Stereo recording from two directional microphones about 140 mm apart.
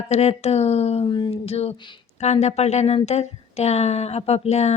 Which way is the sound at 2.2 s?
50° left (ahead or behind).